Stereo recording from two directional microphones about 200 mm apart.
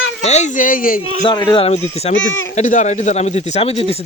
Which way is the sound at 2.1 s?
75° left (ahead or behind).